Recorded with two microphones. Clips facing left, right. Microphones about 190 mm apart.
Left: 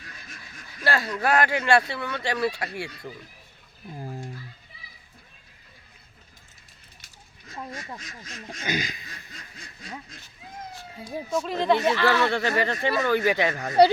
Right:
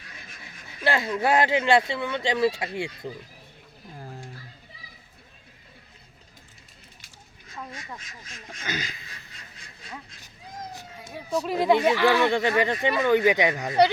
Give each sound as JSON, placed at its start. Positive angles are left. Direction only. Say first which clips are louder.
{"t": 0.7, "sound": "speech", "louder": "right 1 dB", "side_deg": -20}
{"t": 3.9, "sound": "roaring cats", "louder": "left 5 dB", "side_deg": 15}
{"t": 8.4, "sound": "speech", "louder": "left 4 dB", "side_deg": 15}
{"t": 11.4, "sound": "speech", "louder": "right 2 dB", "side_deg": -5}